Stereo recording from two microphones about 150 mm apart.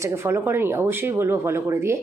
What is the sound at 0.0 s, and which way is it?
Speech, 15° right (ahead or behind).